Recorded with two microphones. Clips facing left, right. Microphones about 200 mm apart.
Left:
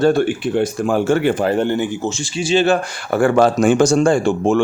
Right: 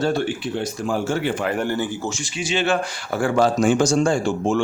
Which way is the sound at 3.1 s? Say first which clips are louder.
Left 5 dB; 60° left (ahead or behind).